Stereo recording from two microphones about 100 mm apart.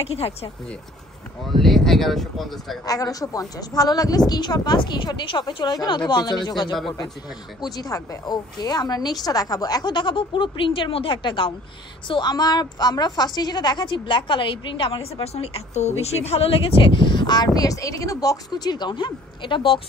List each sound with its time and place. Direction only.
0.0 s speech: 90° left
1.4 s speech: centre (ahead or behind)
2.8 s a woman's voice: 35° left (ahead or behind); by 11.5 s 55° left (ahead or behind)
12.1 s a woman's voice: 45° left (ahead or behind)